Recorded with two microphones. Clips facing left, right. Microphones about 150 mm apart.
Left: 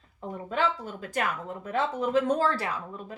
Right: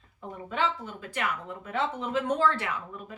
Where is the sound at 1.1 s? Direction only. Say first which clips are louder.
Left 2 dB; 40° left (ahead or behind).